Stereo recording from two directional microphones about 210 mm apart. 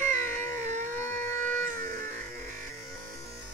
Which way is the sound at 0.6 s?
35° right (ahead or behind).